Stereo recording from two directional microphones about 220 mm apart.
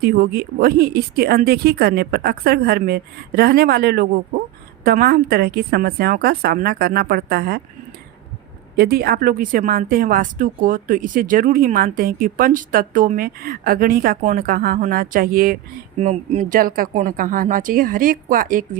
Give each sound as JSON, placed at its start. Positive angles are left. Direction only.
{"t": 0.0, "sound": "speech", "side_deg": -45}
{"t": 8.7, "sound": "speech", "side_deg": -45}